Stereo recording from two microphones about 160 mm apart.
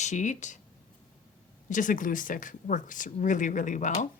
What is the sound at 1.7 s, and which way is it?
Speech, 55° left (ahead or behind).